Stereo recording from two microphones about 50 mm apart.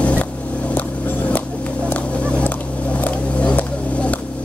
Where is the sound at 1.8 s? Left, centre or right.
Left.